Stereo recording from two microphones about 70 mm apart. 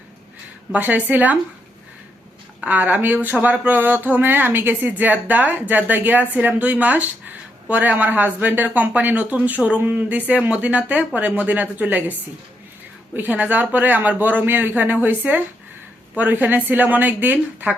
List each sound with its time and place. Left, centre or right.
0.7 s speech: right
2.6 s speech: right
13.1 s speech: right